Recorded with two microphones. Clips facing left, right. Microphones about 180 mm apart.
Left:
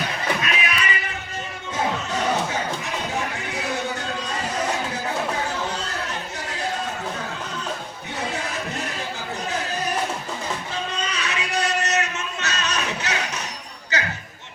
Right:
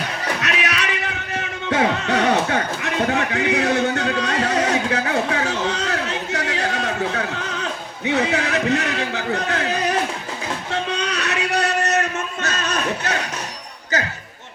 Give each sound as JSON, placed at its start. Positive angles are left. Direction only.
{"t": 0.4, "sound": "music", "side_deg": -80}
{"t": 10.7, "sound": "a sound", "side_deg": -70}
{"t": 13.9, "sound": "basketball bounce", "side_deg": -45}